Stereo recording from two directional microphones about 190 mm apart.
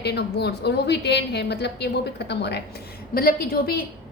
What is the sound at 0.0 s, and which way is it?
A woman's voice, 60° left (ahead or behind).